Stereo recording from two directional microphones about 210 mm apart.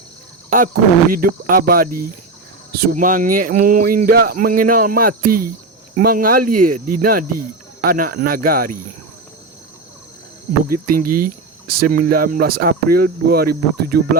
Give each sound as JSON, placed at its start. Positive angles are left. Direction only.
{"t": 0.5, "sound": "speech", "side_deg": -40}
{"t": 10.7, "sound": "speech", "side_deg": -40}